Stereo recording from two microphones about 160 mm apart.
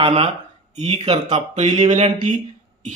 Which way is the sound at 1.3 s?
45° right (ahead or behind).